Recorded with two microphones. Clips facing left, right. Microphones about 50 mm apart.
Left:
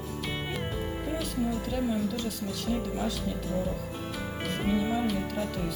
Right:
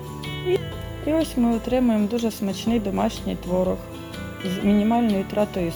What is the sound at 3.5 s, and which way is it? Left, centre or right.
Speech, right.